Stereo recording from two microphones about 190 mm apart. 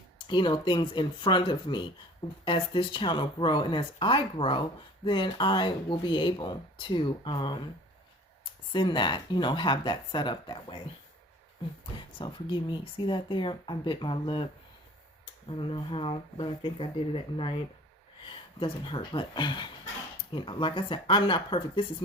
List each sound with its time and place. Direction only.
0.3 s speech: 25° left (ahead or behind)
8.7 s speech: 25° left (ahead or behind)
12.2 s speech: 25° left (ahead or behind)
15.4 s speech: 25° left (ahead or behind)